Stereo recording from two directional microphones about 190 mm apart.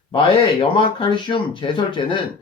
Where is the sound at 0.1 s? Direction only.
25° left (ahead or behind).